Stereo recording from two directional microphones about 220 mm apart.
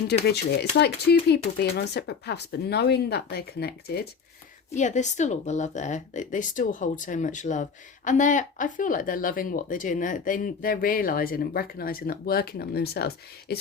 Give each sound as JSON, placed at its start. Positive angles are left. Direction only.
{"t": 0.1, "sound": "speech", "side_deg": 45}
{"t": 4.7, "sound": "a woman's voice", "side_deg": 35}